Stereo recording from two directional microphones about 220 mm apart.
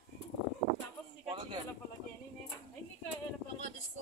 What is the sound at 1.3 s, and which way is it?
Speech, 20° right (ahead or behind).